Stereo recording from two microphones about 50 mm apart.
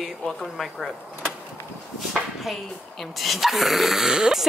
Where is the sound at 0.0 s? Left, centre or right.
Centre.